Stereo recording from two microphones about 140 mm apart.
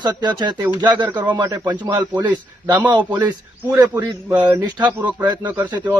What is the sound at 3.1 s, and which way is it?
Speech, 30° right (ahead or behind).